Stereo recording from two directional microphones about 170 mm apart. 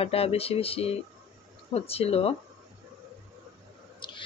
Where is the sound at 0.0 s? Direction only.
35° left (ahead or behind).